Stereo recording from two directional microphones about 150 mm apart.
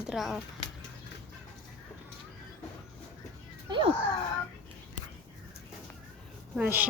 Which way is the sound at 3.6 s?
30° right (ahead or behind).